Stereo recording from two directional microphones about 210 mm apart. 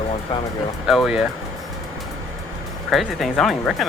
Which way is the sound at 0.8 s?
Centre (ahead or behind).